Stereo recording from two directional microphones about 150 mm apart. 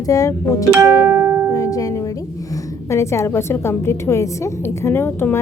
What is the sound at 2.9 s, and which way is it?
A woman's voice, 20° left (ahead or behind).